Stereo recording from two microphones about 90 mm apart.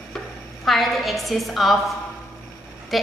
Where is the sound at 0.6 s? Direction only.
Centre (ahead or behind).